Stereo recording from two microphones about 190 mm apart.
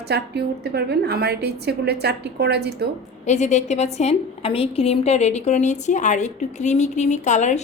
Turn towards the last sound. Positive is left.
turn(degrees=40)  # may be behind; listen again after turning